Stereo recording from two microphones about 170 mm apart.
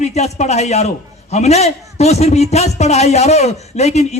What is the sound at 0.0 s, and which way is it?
A man's voice, 40° left (ahead or behind).